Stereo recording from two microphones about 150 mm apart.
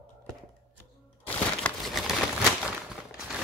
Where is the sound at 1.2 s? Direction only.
10° left (ahead or behind).